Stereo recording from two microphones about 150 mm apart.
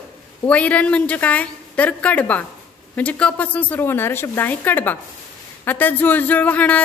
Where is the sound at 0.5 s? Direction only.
10° left (ahead or behind).